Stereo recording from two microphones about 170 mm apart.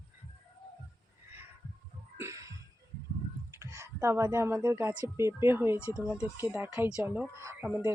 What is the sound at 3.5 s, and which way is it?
Speech, 15° right (ahead or behind).